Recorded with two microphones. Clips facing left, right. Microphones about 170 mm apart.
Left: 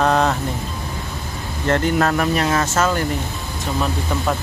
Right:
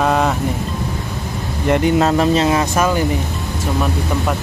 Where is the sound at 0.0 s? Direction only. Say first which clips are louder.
Right 1 dB; 5° right (ahead or behind).